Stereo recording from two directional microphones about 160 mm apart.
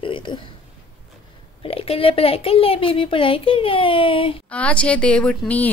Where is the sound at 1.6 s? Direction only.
35° left (ahead or behind).